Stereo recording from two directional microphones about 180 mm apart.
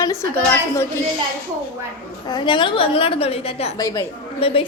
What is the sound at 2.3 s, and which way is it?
A woman's voice, 25° left (ahead or behind).